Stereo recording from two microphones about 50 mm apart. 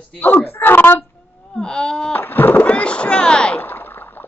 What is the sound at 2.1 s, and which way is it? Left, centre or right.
Speech, left.